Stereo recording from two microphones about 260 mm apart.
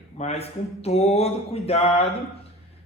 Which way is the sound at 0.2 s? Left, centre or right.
Left.